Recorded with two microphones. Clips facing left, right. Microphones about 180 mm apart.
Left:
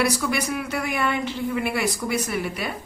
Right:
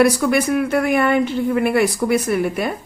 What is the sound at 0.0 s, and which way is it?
Speech, 50° right (ahead or behind).